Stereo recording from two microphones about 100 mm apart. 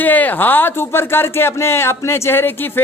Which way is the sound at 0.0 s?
15° left (ahead or behind).